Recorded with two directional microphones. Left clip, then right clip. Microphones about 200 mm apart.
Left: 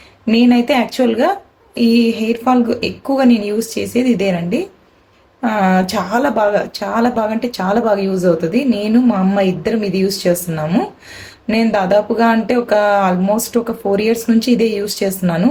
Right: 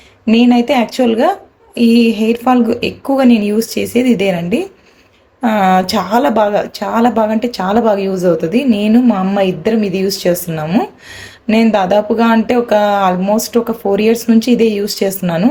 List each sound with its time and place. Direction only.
0.3 s speech: 15° right (ahead or behind)